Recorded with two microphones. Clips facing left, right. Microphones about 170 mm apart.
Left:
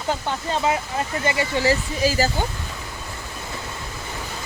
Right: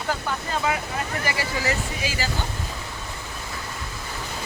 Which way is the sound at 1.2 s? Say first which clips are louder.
Left 7 dB; 25° left (ahead or behind).